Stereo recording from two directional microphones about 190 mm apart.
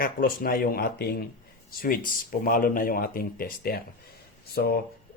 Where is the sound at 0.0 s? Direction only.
50° left (ahead or behind).